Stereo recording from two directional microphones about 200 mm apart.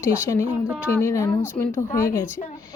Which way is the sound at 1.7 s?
45° left (ahead or behind).